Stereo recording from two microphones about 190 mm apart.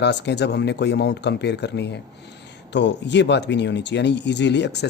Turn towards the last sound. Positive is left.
turn(degrees=65)  # may be behind; listen again after turning